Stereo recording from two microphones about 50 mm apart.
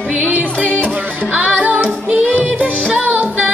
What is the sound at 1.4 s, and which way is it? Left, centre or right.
Music, right.